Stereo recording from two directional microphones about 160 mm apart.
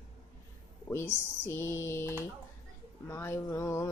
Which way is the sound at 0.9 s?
15° left (ahead or behind).